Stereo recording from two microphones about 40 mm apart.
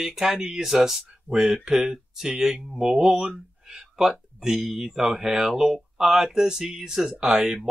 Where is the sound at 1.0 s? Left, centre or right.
Centre.